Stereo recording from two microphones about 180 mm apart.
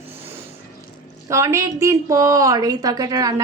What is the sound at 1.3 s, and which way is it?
A woman's voice, 15° right (ahead or behind).